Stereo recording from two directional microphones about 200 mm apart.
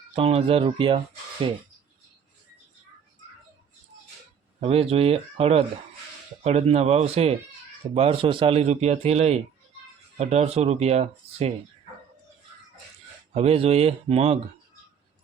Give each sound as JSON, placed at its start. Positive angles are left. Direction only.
{"t": 0.1, "sound": "speech", "side_deg": -30}
{"t": 4.6, "sound": "speech", "side_deg": -30}
{"t": 13.3, "sound": "speech", "side_deg": -30}